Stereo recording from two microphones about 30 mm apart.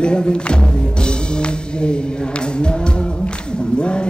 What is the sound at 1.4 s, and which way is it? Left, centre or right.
Music, left.